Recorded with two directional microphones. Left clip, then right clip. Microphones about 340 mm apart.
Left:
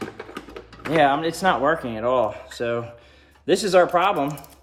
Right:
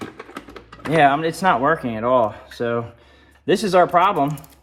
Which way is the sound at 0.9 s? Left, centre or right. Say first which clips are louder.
Right 3 dB; centre.